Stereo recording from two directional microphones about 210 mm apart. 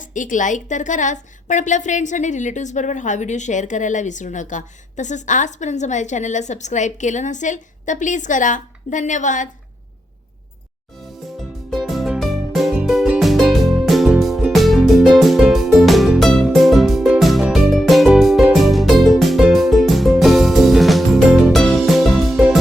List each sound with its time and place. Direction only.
0.0 s a woman's voice: 40° left (ahead or behind)
11.7 s music: centre (ahead or behind)